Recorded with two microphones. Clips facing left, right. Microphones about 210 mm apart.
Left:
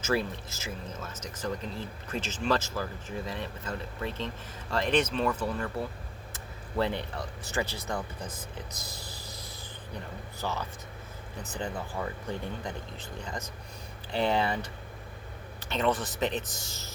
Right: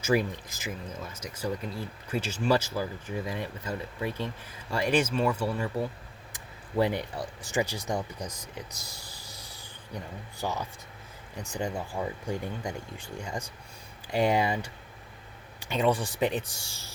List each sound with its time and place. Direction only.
0.0 s speech: 15° right (ahead or behind)
8.9 s a sound: 15° right (ahead or behind)
10.4 s speech: 15° right (ahead or behind)